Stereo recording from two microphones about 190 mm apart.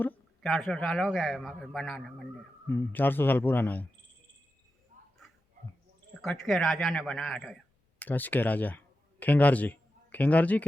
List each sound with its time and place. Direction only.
0.0 s a man's voice: centre (ahead or behind)
4.9 s a sound: 40° right (ahead or behind)
6.2 s speech: centre (ahead or behind)